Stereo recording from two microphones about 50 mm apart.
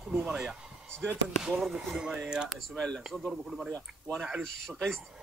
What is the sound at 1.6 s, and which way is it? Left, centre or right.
Speech, centre.